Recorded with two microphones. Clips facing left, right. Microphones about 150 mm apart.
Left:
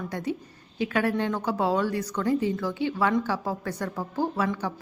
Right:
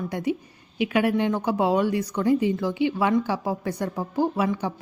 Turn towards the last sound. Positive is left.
turn(degrees=-15)  # may be behind; listen again after turning